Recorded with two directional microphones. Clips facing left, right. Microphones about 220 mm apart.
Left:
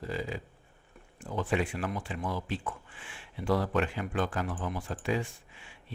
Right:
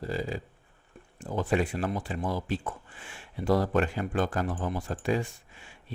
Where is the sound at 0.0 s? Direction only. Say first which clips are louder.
Right 3 dB; 35° right (ahead or behind).